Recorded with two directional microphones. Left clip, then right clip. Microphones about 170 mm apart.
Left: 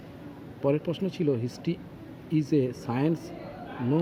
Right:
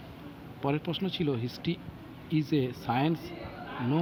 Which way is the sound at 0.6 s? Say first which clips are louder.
Left 4 dB; 5° left (ahead or behind).